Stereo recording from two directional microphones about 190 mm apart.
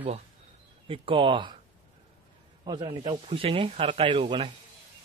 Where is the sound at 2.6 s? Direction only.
25° right (ahead or behind).